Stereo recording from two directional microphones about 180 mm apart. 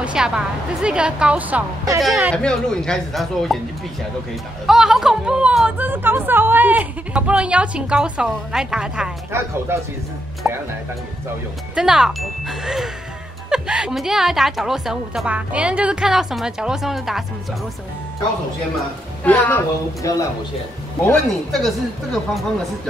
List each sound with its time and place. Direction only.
0.0 s a sound: 5° right (ahead or behind)
0.8 s speech: 5° right (ahead or behind)
4.6 s speech: 5° right (ahead or behind)
11.7 s speech: 5° right (ahead or behind)
19.2 s a woman's voice: 10° left (ahead or behind)